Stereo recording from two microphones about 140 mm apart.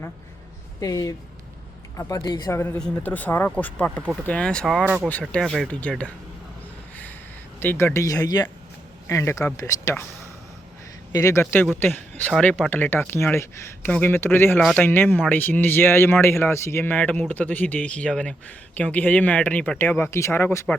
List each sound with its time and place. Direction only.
0.8 s speech: 25° left (ahead or behind); by 6.1 s 10° left (ahead or behind)
6.9 s a sound: 10° left (ahead or behind)
7.6 s speech: 15° left (ahead or behind)
11.1 s speech: 20° left (ahead or behind)